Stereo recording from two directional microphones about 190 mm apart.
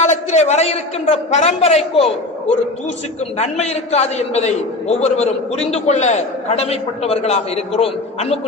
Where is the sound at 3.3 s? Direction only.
35° left (ahead or behind).